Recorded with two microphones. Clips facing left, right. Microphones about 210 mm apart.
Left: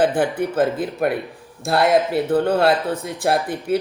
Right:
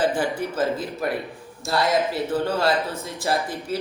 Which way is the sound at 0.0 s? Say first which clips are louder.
Left 4 dB; 60° left (ahead or behind).